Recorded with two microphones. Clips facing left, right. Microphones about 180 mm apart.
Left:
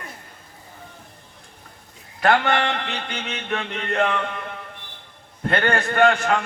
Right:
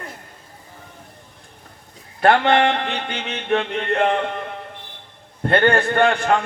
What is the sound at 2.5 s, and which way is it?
A man's voice, 55° right (ahead or behind).